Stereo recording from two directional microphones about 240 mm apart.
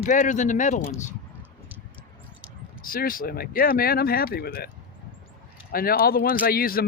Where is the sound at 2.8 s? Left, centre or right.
Left.